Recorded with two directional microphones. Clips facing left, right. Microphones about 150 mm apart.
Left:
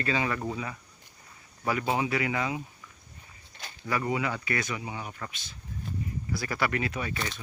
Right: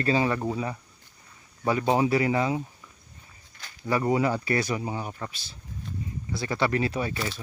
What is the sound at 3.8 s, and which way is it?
Speech, 35° right (ahead or behind).